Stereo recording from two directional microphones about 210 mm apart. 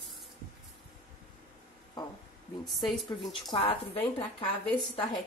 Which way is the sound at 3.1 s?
25° left (ahead or behind).